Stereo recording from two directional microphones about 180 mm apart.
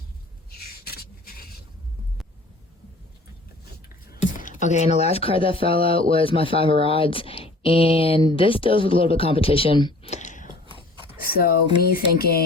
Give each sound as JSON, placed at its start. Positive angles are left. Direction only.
{"t": 0.5, "sound": "writing", "side_deg": 60}
{"t": 4.2, "sound": "speech", "side_deg": 45}
{"t": 10.1, "sound": "whispering", "side_deg": 40}
{"t": 10.7, "sound": "a sound", "side_deg": -30}
{"t": 11.2, "sound": "speech", "side_deg": 55}